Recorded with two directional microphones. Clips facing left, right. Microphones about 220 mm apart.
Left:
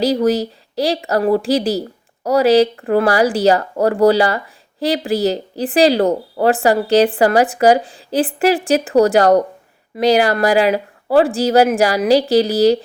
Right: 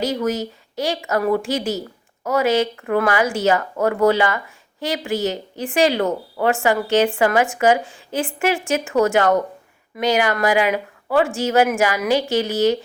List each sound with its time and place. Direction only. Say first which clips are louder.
0.0 s speech: left 6 dB; 35° left (ahead or behind)